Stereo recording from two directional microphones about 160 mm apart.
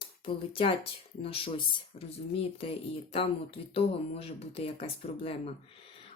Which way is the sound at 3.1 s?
35° left (ahead or behind).